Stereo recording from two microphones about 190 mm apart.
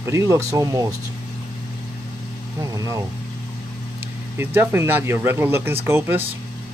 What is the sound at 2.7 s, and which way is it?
Vehicle, 20° right (ahead or behind).